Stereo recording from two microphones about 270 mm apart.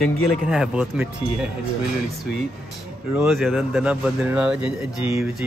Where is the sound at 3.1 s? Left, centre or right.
Centre.